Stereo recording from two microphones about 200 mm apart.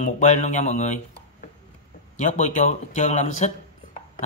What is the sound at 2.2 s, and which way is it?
Speech, 35° left (ahead or behind).